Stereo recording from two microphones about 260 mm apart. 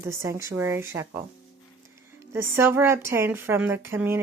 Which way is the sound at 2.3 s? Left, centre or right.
Centre.